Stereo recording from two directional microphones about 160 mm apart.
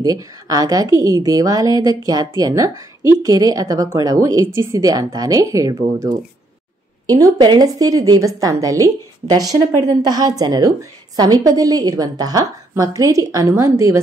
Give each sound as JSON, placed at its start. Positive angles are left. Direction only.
{"t": 0.0, "sound": "a woman's voice", "side_deg": -20}